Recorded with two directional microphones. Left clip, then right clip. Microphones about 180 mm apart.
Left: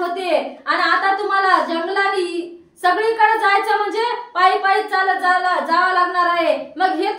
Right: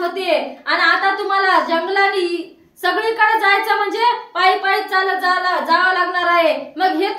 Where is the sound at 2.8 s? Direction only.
20° right (ahead or behind).